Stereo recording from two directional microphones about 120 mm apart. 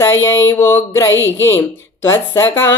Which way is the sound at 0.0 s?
20° left (ahead or behind).